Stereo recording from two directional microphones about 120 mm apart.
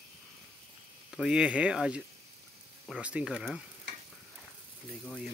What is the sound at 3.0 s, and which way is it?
Speech, 10° right (ahead or behind).